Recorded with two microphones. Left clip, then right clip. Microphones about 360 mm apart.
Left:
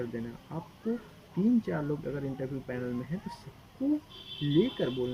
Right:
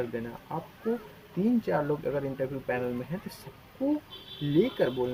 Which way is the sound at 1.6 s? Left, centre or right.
Right.